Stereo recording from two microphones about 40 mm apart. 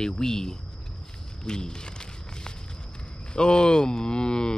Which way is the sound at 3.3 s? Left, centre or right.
Left.